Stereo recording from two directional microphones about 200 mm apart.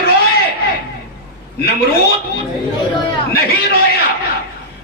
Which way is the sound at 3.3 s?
50° left (ahead or behind).